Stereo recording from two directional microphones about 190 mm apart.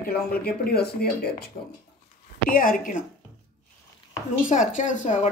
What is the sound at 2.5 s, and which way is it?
Speech, 45° left (ahead or behind).